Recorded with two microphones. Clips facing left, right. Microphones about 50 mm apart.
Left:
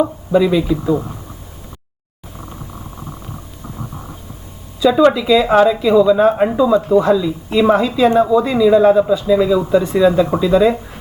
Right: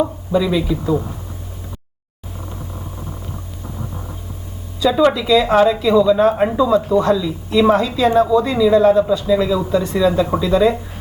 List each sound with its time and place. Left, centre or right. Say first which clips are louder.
0.0 s speech: left 4 dB; centre
5.1 s a woman's voice: left 2 dB; centre